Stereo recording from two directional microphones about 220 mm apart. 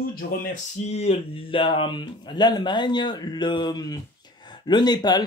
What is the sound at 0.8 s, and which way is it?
Speech, 30° left (ahead or behind).